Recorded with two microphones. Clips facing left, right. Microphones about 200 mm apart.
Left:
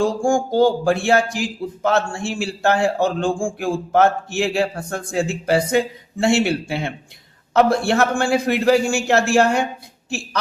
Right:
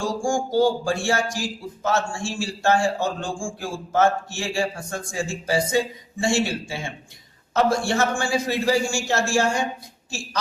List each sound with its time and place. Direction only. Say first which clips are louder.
0.0 s speech: left 6 dB; 60° left (ahead or behind)